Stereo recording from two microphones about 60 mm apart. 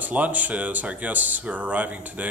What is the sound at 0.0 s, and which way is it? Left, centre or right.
Speech, right.